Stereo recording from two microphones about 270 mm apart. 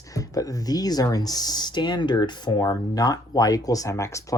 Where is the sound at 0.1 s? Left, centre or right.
Centre.